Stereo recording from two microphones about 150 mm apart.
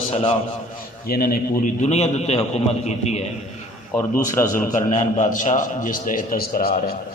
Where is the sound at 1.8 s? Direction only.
45° left (ahead or behind).